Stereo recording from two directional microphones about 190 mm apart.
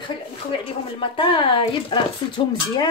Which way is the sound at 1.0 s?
25° left (ahead or behind).